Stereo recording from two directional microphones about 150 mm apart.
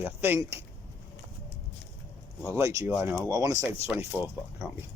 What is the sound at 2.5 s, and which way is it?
Speech, 20° right (ahead or behind).